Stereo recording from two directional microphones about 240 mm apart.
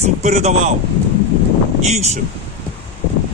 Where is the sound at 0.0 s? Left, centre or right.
Right.